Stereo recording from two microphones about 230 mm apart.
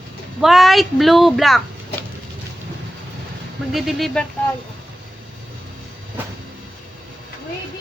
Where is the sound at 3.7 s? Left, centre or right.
Centre.